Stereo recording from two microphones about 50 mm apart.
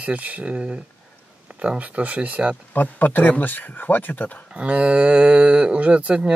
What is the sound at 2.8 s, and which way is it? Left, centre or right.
Speech, left.